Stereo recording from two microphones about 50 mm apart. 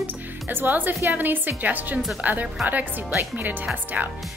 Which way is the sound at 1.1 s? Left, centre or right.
Right.